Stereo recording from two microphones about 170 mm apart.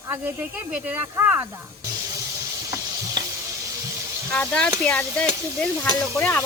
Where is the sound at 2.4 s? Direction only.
20° right (ahead or behind).